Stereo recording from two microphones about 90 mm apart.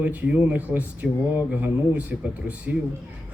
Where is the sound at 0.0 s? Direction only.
20° right (ahead or behind).